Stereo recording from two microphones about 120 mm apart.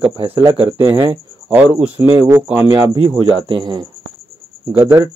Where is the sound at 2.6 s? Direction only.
40° right (ahead or behind).